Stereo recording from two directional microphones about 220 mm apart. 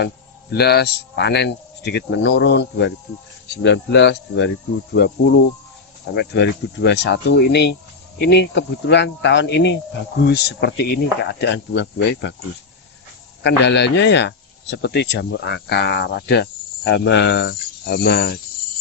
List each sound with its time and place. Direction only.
0.5 s a man's voice: 45° left (ahead or behind)
13.4 s a man's voice: 50° left (ahead or behind)